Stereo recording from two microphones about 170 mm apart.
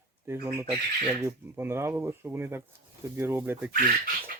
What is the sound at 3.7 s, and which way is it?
Speech, 55° right (ahead or behind).